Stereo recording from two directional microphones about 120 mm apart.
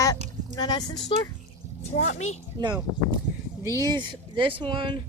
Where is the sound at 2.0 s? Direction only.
70° left (ahead or behind).